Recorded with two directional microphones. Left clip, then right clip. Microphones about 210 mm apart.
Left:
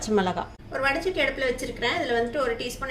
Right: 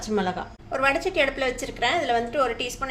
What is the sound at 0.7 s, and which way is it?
A woman's voice, 55° right (ahead or behind).